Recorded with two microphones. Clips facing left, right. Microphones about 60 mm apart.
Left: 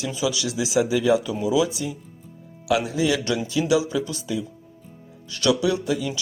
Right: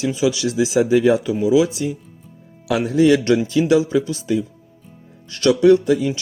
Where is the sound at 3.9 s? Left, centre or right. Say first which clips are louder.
Right 7 dB; right.